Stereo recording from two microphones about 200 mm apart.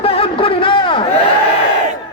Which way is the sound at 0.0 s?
30° left (ahead or behind).